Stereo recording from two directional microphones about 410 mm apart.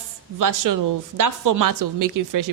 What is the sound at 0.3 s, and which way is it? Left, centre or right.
A woman's voice, right.